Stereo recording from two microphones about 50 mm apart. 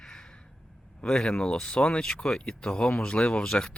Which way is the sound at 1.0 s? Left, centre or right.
Left.